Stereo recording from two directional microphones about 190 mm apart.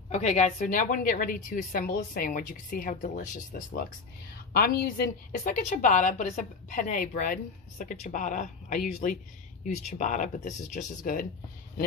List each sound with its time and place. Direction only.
0.1 s a woman's voice: 35° left (ahead or behind)